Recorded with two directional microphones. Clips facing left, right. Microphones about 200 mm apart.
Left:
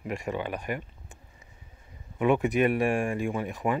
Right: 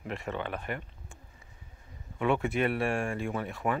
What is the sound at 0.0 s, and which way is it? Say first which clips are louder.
Speech: left 3 dB; 15° left (ahead or behind).